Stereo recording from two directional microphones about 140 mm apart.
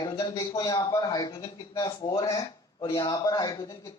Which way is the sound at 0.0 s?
25° left (ahead or behind).